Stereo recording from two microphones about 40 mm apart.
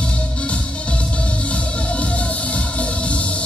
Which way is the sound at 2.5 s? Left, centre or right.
Left.